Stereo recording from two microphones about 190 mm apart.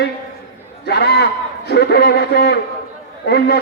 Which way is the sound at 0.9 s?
60° left (ahead or behind).